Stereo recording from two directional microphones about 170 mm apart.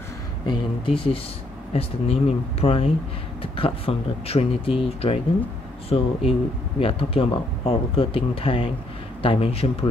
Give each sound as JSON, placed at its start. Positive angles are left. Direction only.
{"t": 0.5, "sound": "speech", "side_deg": 30}